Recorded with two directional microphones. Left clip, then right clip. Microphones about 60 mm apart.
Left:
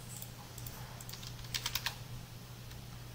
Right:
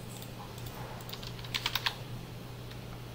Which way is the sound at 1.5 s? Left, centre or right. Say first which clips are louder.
Right 6 dB; centre.